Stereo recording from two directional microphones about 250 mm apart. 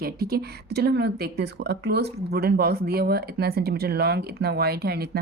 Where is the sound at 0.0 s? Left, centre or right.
Right.